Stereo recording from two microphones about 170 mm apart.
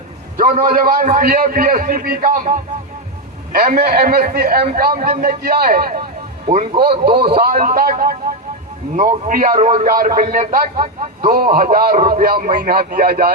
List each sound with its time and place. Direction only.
0.6 s a man's voice: 55° right (ahead or behind)
6.4 s a man's voice: 45° right (ahead or behind); by 13.3 s 60° right (ahead or behind)